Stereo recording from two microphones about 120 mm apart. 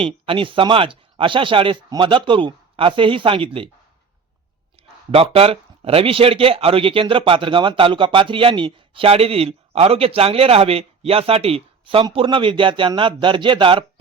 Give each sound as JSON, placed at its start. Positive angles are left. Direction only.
{"t": 0.0, "sound": "speech", "side_deg": -45}
{"t": 4.8, "sound": "speech", "side_deg": -55}